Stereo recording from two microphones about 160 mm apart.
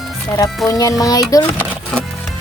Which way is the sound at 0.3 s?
20° left (ahead or behind).